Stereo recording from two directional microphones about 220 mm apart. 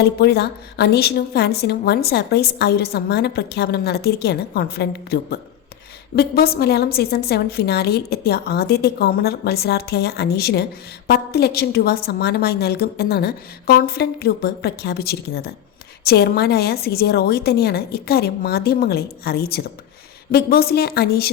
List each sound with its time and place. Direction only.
0.0 s a woman's voice: 50° left (ahead or behind)